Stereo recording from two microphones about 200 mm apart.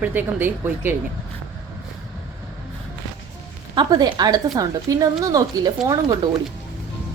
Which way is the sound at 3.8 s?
20° right (ahead or behind).